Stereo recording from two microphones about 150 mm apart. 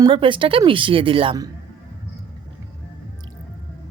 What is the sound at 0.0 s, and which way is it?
A woman's voice, 35° right (ahead or behind).